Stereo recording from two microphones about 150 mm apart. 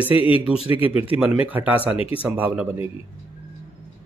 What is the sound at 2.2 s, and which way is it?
Speech, 10° right (ahead or behind).